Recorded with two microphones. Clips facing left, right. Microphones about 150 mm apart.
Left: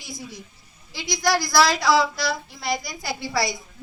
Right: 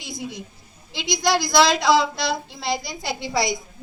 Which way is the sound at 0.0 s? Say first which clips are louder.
Right 5 dB; 20° right (ahead or behind).